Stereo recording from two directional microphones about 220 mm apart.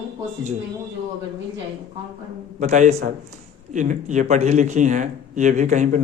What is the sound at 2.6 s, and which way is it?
A man's voice, 30° right (ahead or behind).